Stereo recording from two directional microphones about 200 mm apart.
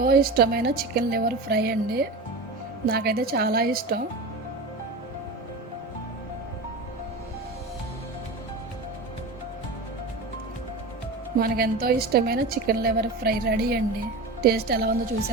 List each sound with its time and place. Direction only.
0.0 s a woman's voice: 50° right (ahead or behind)
11.3 s a woman's voice: 50° right (ahead or behind)